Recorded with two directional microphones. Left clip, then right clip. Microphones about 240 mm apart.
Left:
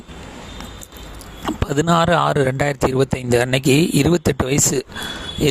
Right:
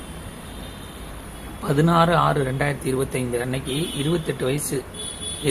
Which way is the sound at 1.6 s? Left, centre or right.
Left.